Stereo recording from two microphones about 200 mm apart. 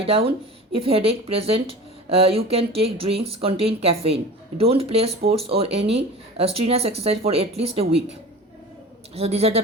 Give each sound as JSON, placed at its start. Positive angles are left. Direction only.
{"t": 0.0, "sound": "speech", "side_deg": -30}
{"t": 9.1, "sound": "a man's voice", "side_deg": -30}